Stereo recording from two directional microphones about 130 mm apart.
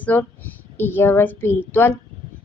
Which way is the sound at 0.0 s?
15° left (ahead or behind).